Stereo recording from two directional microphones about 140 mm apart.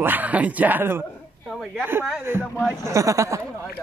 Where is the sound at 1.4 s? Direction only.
5° left (ahead or behind).